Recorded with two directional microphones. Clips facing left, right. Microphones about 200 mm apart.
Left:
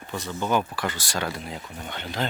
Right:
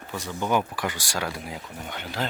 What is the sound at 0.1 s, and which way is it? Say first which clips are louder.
Speech: even; 10° right (ahead or behind).